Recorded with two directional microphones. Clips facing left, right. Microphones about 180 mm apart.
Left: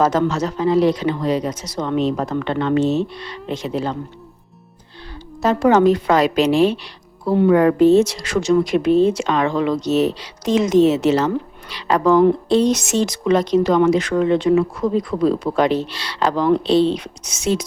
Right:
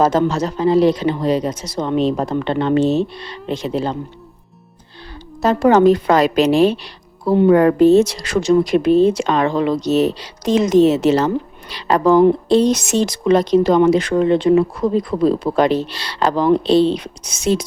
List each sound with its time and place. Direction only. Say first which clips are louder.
0.0 s speech: right 2 dB; 30° right (ahead or behind)
5.4 s speech: right 2 dB; 40° right (ahead or behind)